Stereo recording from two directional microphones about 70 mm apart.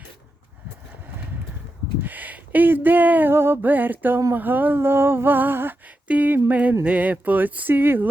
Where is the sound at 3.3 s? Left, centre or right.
Right.